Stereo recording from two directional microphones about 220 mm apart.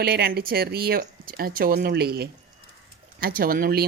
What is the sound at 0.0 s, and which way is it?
Speech, 45° right (ahead or behind).